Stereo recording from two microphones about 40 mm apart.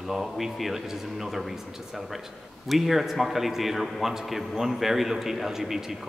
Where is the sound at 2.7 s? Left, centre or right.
Centre.